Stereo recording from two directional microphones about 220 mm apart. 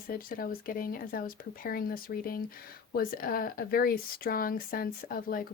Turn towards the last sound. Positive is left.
turn(degrees=40)  # may be behind; listen again after turning